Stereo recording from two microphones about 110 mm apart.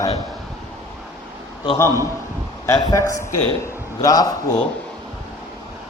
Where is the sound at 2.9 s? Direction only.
30° left (ahead or behind).